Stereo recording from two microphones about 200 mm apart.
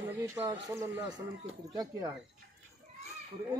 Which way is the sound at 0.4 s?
15° right (ahead or behind).